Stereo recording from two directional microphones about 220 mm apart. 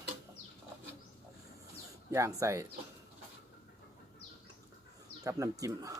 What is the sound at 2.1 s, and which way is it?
Speech, 15° right (ahead or behind).